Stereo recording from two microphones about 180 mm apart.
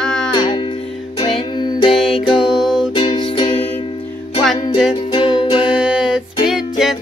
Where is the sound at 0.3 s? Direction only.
25° left (ahead or behind).